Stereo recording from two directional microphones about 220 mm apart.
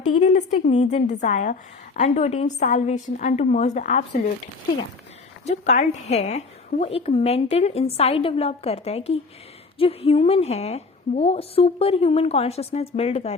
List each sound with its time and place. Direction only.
0.1 s a woman's voice: 30° left (ahead or behind)
5.5 s a woman's voice: 30° left (ahead or behind)